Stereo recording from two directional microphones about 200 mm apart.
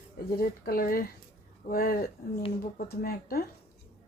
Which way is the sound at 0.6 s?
45° left (ahead or behind).